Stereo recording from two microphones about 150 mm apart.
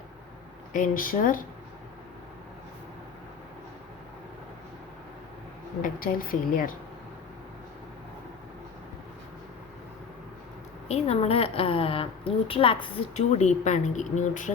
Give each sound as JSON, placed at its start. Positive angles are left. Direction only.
{"t": 0.7, "sound": "speech", "side_deg": 65}
{"t": 5.8, "sound": "speech", "side_deg": 65}
{"t": 10.8, "sound": "a woman's voice", "side_deg": 45}